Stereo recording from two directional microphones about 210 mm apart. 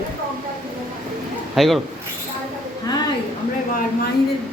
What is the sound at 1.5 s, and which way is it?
Speech, centre (ahead or behind).